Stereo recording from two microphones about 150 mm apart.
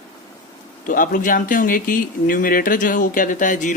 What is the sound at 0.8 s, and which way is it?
Speech, 65° left (ahead or behind).